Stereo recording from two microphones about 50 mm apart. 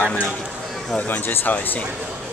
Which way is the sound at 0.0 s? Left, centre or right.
Left.